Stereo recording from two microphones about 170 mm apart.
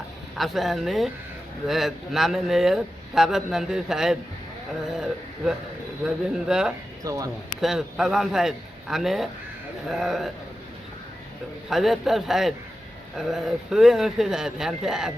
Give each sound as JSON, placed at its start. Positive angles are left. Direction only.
{"t": 0.3, "sound": "a man's voice", "side_deg": 0}
{"t": 7.0, "sound": "speech", "side_deg": -20}
{"t": 7.6, "sound": "a man's voice", "side_deg": 0}
{"t": 11.7, "sound": "a man's voice", "side_deg": 0}